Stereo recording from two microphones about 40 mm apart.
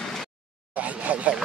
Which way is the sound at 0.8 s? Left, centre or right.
Right.